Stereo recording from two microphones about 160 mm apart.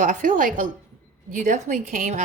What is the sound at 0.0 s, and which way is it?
A woman's voice, 55° right (ahead or behind).